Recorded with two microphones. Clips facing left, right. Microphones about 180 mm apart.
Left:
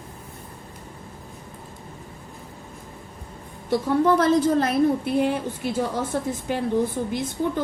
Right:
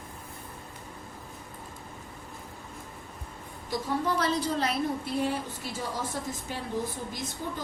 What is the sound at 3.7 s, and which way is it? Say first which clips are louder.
A woman's voice: left 10 dB; 55° left (ahead or behind).